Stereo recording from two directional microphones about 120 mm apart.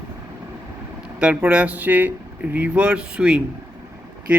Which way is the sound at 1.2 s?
10° right (ahead or behind).